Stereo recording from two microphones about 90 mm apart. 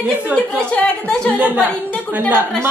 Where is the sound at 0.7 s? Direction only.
15° left (ahead or behind).